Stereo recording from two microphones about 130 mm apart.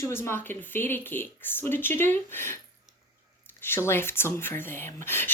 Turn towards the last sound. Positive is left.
turn(degrees=15)  # may be behind; listen again after turning